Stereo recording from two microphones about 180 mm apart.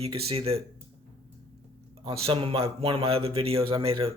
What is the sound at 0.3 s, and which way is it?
Speech, 35° right (ahead or behind).